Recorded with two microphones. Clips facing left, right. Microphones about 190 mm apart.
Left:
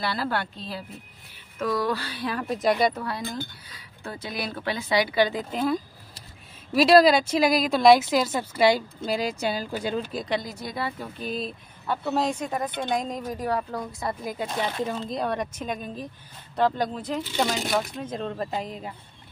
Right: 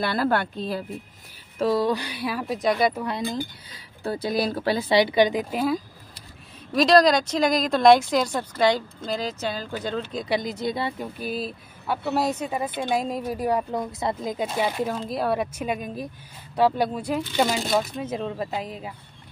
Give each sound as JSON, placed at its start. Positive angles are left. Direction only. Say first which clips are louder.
{"t": 0.0, "sound": "a woman's voice", "louder": "right 5 dB", "side_deg": -50}
{"t": 1.6, "sound": "speech", "louder": "right 4 dB", "side_deg": -25}
{"t": 3.0, "sound": "speech", "louder": "right 4 dB", "side_deg": -15}
{"t": 3.7, "sound": "speech", "louder": "right 9 dB", "side_deg": -35}
{"t": 6.7, "sound": "speech", "louder": "left 1 dB", "side_deg": 5}
{"t": 10.4, "sound": "speech", "louder": "right 5 dB", "side_deg": -20}
{"t": 11.1, "sound": "speech", "louder": "right 1 dB", "side_deg": -5}